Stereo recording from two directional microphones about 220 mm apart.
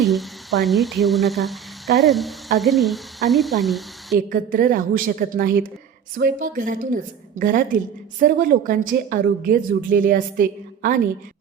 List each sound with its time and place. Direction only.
0.0 s speech: centre (ahead or behind)
4.3 s a woman's voice: 40° right (ahead or behind)